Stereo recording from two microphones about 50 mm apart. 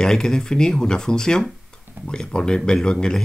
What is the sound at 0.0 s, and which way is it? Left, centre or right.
Speech, centre.